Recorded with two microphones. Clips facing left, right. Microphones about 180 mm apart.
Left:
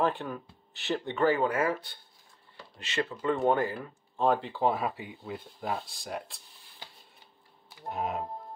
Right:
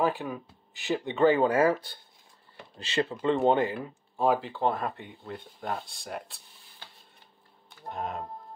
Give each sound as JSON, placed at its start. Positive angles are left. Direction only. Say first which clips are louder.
{"t": 0.0, "sound": "speech", "louder": "right 1 dB", "side_deg": -10}
{"t": 1.1, "sound": "speech", "louder": "right 4 dB", "side_deg": -25}
{"t": 4.2, "sound": "speech", "louder": "right 1 dB", "side_deg": -5}
{"t": 7.9, "sound": "speech", "louder": "left 2 dB", "side_deg": 5}